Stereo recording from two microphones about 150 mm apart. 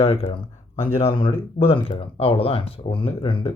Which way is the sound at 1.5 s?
35° left (ahead or behind).